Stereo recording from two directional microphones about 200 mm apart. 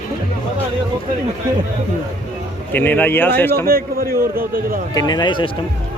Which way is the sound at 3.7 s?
45° right (ahead or behind).